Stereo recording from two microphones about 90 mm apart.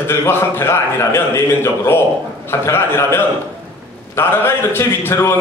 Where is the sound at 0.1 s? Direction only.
25° left (ahead or behind).